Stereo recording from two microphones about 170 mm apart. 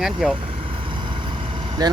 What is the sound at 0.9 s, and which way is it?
Vehicle, 30° right (ahead or behind).